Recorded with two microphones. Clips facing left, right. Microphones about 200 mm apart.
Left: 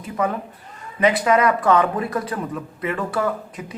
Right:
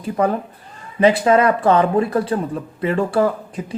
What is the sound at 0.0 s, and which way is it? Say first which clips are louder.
Speech: right 5 dB; 35° right (ahead or behind).